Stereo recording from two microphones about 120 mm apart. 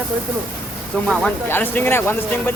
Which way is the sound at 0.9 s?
10° left (ahead or behind).